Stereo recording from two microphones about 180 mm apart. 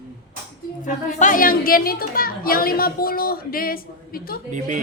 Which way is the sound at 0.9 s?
45° left (ahead or behind).